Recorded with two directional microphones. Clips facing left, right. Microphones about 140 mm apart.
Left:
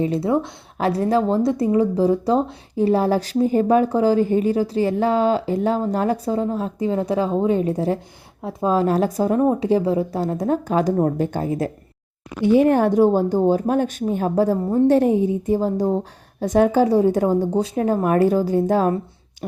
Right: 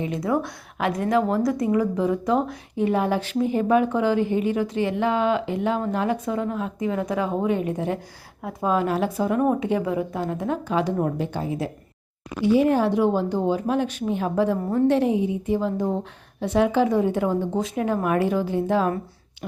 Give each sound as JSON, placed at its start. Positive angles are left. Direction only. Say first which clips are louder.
{"t": 0.0, "sound": "a woman's voice", "louder": "left 4 dB", "side_deg": 30}
{"t": 9.4, "sound": "speech", "louder": "left 4 dB", "side_deg": 30}